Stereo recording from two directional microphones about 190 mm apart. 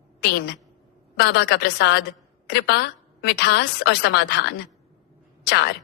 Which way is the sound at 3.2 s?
60° left (ahead or behind).